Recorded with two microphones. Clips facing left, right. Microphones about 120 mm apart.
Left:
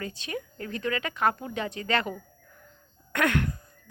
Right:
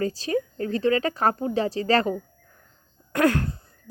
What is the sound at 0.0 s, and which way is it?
Speech, 35° right (ahead or behind).